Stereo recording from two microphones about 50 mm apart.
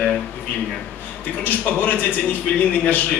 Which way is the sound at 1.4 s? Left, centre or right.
Left.